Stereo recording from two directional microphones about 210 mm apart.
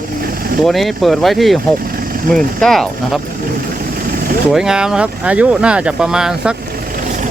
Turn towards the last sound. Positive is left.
turn(degrees=-40)  # may be behind; listen again after turning